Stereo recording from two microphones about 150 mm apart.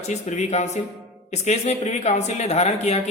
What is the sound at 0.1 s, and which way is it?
A man's voice, 50° left (ahead or behind).